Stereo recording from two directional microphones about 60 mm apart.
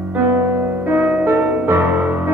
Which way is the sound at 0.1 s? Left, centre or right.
Right.